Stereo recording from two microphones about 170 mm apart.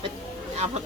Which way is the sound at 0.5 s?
40° right (ahead or behind).